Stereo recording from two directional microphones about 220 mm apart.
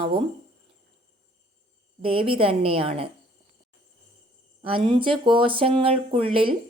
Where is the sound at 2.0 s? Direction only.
25° right (ahead or behind).